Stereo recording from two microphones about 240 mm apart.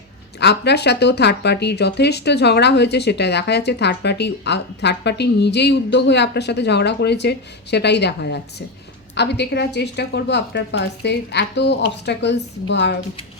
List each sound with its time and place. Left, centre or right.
0.3 s speech: left